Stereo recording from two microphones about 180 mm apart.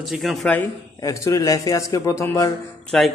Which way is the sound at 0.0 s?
Centre (ahead or behind).